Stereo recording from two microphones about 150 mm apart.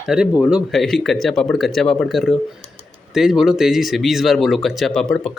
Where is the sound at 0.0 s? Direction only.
5° right (ahead or behind).